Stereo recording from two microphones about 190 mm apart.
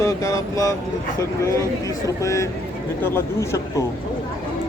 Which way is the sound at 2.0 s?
15° left (ahead or behind).